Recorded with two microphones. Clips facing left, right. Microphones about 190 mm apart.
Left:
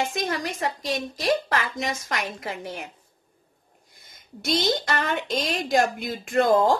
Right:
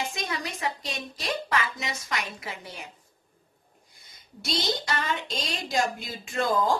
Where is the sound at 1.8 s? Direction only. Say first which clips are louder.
Left 5 dB; 50° left (ahead or behind).